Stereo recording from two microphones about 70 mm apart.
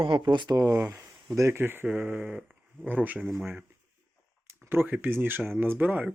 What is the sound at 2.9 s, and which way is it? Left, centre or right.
Speech, right.